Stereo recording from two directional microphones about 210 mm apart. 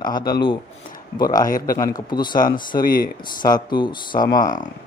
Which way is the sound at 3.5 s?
20° left (ahead or behind).